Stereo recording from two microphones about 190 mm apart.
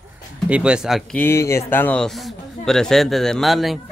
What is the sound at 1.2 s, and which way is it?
A man's voice, 15° left (ahead or behind).